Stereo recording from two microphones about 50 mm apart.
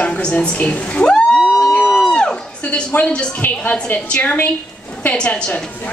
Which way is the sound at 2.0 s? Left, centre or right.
Centre.